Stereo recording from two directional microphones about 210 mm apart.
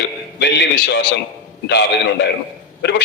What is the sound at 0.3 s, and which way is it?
Speech, 55° left (ahead or behind).